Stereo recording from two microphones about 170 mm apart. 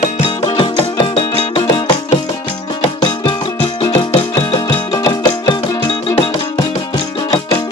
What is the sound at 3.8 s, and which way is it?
Music, 30° left (ahead or behind).